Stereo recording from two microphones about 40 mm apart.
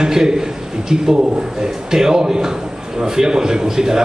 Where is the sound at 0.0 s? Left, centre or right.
Centre.